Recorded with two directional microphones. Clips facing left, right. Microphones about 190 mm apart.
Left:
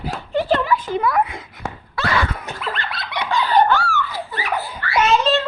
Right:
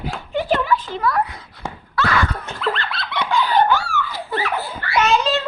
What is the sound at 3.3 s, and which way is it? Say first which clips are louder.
Chicken: even; centre (ahead or behind).